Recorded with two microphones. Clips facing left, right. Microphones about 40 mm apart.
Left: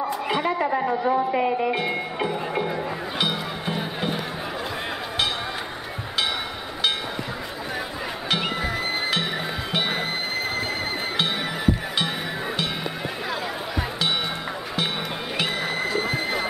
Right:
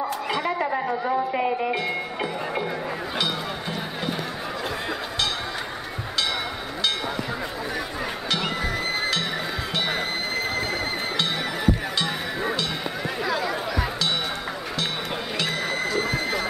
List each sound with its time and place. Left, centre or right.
0.3 s a woman's voice: centre
3.2 s music: centre
15.3 s music: centre